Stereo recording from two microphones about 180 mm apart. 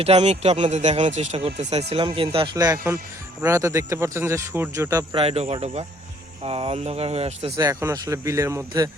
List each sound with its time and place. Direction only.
0.0 s speech: 35° right (ahead or behind); by 5.0 s 15° right (ahead or behind)
5.1 s speech: 35° right (ahead or behind)
7.5 s speech: 20° right (ahead or behind)